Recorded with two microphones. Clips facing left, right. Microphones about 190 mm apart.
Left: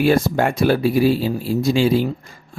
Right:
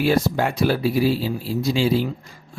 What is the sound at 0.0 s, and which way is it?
Speech, 50° left (ahead or behind).